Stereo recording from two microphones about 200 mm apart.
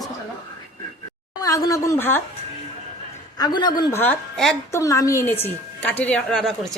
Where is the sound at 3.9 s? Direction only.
5° left (ahead or behind).